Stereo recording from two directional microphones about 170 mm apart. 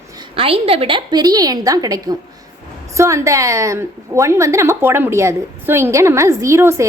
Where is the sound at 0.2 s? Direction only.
35° right (ahead or behind).